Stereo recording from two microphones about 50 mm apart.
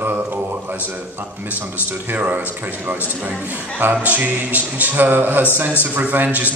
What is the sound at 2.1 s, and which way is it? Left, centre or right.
Speech, right.